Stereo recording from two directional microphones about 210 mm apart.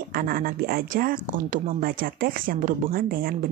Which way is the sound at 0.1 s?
45° right (ahead or behind).